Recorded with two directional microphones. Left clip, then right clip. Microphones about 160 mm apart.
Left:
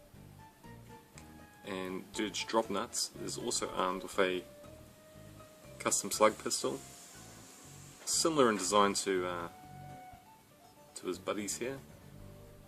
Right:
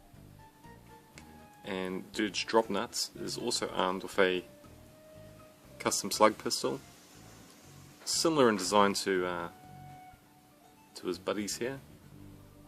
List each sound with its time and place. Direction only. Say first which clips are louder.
1.6 s speech: right 3 dB; 30° right (ahead or behind)
5.7 s speech: right 2 dB; 30° right (ahead or behind)
8.0 s speech: right 2 dB; 30° right (ahead or behind)
10.9 s speech: right 3 dB; 30° right (ahead or behind)